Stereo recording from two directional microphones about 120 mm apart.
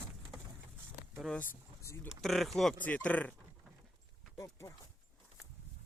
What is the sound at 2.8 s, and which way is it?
Speech, 10° left (ahead or behind).